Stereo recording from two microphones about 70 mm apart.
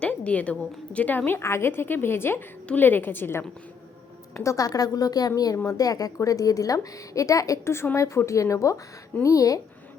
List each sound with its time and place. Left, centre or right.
0.0 s a sound: centre
0.9 s a woman's voice: left
4.4 s a woman's voice: left
7.6 s a woman's voice: left